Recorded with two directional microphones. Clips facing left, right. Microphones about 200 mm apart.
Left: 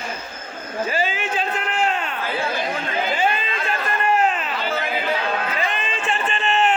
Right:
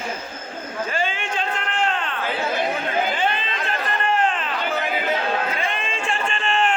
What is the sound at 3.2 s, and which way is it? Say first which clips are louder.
Chatter: left 2 dB; 10° left (ahead or behind).